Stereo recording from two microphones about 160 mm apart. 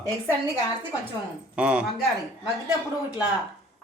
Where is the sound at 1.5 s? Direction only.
5° right (ahead or behind).